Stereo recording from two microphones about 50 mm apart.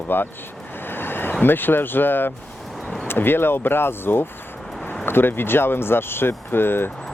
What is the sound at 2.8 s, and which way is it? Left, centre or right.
Music, centre.